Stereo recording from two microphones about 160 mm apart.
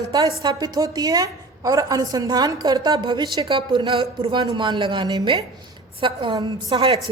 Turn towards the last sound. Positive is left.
turn(degrees=-25)  # may be behind; listen again after turning